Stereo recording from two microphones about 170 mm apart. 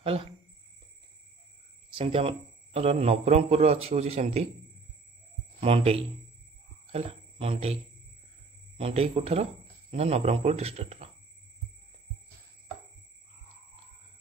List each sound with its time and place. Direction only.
0.0 s speech: 35° right (ahead or behind)
2.0 s a man's voice: 35° right (ahead or behind)
5.6 s a man's voice: 35° right (ahead or behind)